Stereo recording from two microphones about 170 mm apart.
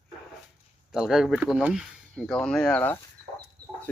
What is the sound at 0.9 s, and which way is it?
Speech, 5° right (ahead or behind).